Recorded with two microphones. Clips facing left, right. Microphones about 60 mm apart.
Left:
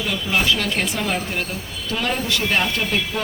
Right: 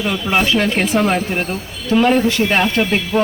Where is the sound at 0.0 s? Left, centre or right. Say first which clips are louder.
Right 4 dB; right.